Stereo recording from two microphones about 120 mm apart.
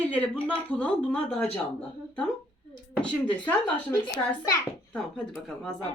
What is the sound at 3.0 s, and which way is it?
Speech, 10° left (ahead or behind).